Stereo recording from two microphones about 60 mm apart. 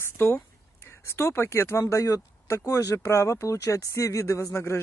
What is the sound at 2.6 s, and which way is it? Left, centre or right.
Speech, left.